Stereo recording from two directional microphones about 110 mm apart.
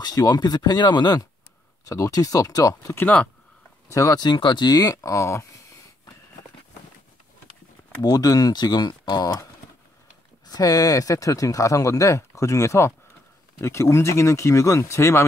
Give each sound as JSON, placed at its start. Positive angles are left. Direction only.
{"t": 0.0, "sound": "speech", "side_deg": 35}
{"t": 8.0, "sound": "speech", "side_deg": 35}